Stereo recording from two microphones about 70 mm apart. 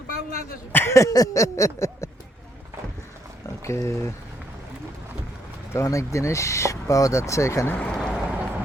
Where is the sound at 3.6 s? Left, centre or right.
Left.